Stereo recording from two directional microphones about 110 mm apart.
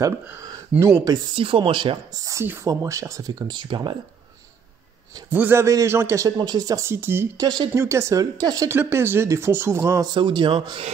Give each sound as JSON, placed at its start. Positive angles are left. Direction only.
{"t": 0.0, "sound": "speech", "side_deg": -30}
{"t": 1.3, "sound": "speech", "side_deg": -55}
{"t": 2.6, "sound": "speech", "side_deg": -30}
{"t": 5.3, "sound": "a man's voice", "side_deg": -20}
{"t": 7.3, "sound": "speech", "side_deg": -40}
{"t": 7.7, "sound": "speech", "side_deg": -25}
{"t": 8.6, "sound": "a man's voice", "side_deg": -20}
{"t": 10.0, "sound": "speech", "side_deg": -45}